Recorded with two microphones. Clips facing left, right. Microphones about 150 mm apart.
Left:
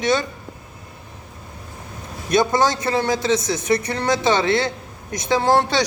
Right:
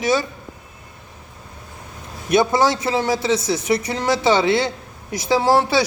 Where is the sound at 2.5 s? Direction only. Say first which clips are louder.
Right 1 dB; 5° right (ahead or behind).